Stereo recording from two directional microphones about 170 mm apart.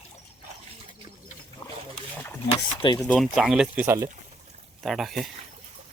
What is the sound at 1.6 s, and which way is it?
Pig, 30° left (ahead or behind).